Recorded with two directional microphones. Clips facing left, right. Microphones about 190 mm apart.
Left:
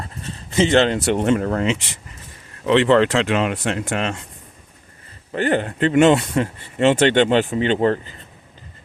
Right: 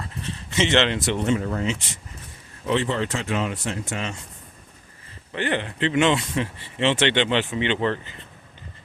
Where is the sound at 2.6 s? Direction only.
80° left.